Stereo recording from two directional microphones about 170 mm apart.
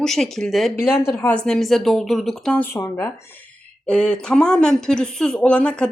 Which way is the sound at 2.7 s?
15° left (ahead or behind).